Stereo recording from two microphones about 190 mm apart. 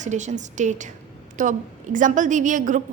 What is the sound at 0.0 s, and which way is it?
A woman's voice, 40° right (ahead or behind).